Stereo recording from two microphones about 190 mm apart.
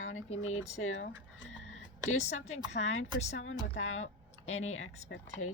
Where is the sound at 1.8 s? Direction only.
90° left.